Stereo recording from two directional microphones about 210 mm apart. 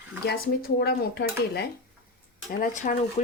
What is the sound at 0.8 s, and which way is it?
Dishes, 50° left (ahead or behind).